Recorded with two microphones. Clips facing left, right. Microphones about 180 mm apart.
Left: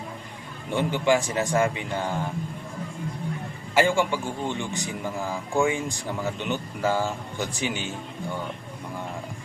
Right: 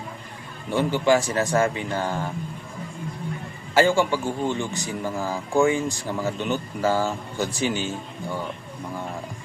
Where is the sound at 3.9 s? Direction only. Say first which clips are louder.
Right 3 dB; 40° right (ahead or behind).